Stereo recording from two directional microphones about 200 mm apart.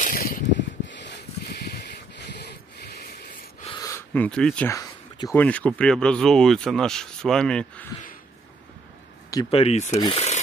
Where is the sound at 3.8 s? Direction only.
10° left (ahead or behind).